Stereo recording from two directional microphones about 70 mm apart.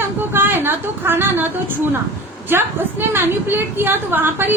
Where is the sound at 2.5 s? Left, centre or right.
Right.